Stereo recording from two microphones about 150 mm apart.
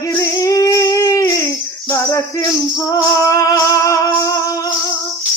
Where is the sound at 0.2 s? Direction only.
25° left (ahead or behind).